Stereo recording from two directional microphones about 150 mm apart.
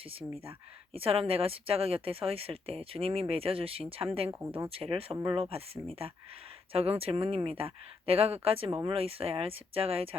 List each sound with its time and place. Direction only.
0.0 s speech: 40° right (ahead or behind)
4.4 s speech: 15° right (ahead or behind)
4.7 s speech: 40° right (ahead or behind)
5.1 s speech: 25° right (ahead or behind)
5.4 s speech: 40° right (ahead or behind)